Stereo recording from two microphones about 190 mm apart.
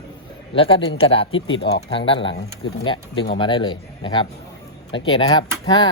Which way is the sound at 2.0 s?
25° left (ahead or behind).